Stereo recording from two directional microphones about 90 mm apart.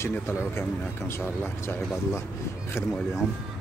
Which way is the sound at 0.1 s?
25° left (ahead or behind).